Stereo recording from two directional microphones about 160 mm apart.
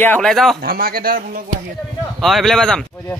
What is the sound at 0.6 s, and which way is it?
Speech, 70° right (ahead or behind).